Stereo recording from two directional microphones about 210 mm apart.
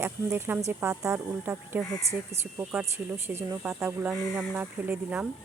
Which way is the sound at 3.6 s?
10° right (ahead or behind).